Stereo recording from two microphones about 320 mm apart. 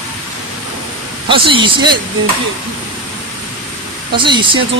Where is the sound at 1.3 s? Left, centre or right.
Centre.